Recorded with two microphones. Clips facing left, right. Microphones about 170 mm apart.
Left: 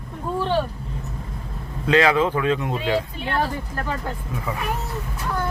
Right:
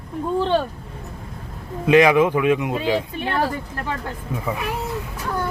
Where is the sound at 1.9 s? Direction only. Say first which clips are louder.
Right 4 dB; 15° right (ahead or behind).